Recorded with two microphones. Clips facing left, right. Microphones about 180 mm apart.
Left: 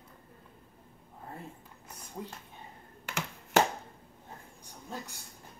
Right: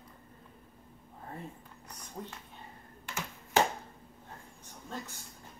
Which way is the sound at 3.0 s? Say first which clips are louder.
Left 3 dB; 75° left (ahead or behind).